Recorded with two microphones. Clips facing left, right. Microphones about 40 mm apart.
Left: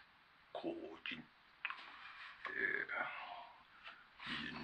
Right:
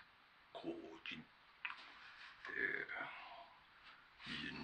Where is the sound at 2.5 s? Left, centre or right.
Centre; by 3.5 s left.